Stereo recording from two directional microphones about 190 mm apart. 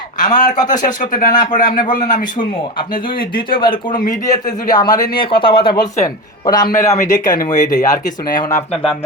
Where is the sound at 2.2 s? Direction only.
25° left (ahead or behind).